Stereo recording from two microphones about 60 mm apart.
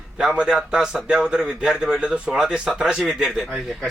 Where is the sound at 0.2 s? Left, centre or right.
Centre.